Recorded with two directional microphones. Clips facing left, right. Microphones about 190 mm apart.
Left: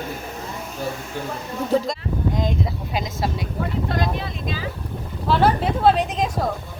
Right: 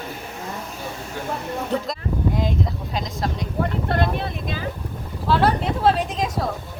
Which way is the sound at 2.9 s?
5° left (ahead or behind).